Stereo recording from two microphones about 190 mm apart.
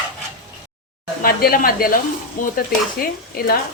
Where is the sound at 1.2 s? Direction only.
50° left (ahead or behind).